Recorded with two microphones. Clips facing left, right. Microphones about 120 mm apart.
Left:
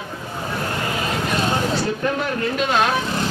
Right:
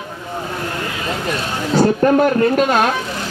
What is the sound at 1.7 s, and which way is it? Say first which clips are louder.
Speech: right 9 dB; 50° right (ahead or behind).